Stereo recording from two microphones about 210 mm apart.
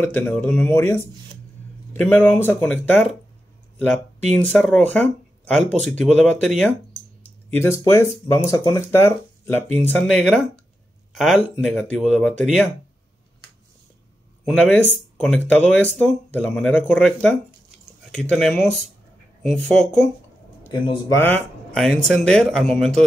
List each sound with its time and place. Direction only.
0.0 s speech: 5° left (ahead or behind)
2.0 s speech: 10° left (ahead or behind)
7.5 s speech: 15° left (ahead or behind)
14.4 s speech: 5° left (ahead or behind)
20.8 s speech: 25° left (ahead or behind)
21.2 s speech: 5° left (ahead or behind)